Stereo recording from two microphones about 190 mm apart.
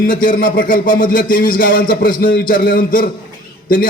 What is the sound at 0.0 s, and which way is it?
A man's voice, 45° left (ahead or behind).